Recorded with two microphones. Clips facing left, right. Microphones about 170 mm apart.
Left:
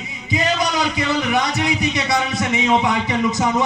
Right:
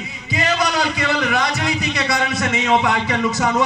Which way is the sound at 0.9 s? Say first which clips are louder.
Left 1 dB; 20° left (ahead or behind).